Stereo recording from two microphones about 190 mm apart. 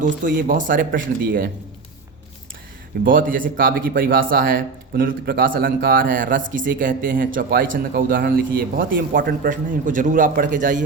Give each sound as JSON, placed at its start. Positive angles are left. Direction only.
{"t": 0.0, "sound": "a man's voice", "side_deg": -45}
{"t": 3.0, "sound": "a man's voice", "side_deg": -45}